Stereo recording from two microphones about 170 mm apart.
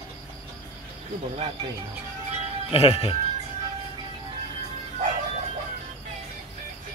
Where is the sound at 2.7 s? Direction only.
35° left (ahead or behind).